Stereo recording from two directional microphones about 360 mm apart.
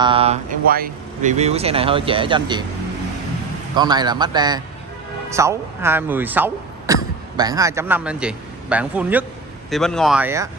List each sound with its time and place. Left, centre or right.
0.0 s speech: centre
3.7 s a man's voice: centre